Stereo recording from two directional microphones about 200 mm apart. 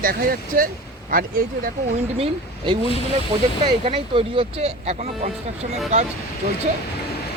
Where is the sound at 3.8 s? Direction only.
25° right (ahead or behind).